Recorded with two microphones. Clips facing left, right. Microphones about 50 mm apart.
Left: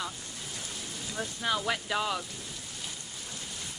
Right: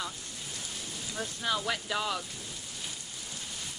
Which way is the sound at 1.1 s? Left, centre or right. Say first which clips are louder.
Left 1 dB; centre.